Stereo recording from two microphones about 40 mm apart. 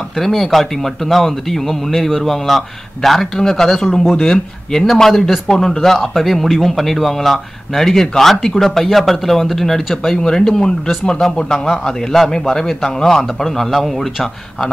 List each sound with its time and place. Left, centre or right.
0.2 s a man's voice: centre
10.1 s a man's voice: centre
11.6 s a man's voice: centre